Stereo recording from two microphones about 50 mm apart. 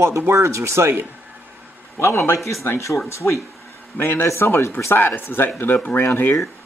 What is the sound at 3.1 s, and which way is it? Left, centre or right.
Speech, left.